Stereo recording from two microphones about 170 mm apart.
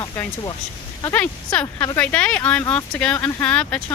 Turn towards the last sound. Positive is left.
turn(degrees=5)  # may be behind; listen again after turning